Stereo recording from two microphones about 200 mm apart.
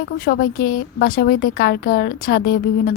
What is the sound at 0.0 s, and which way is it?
A woman's voice, 50° left (ahead or behind).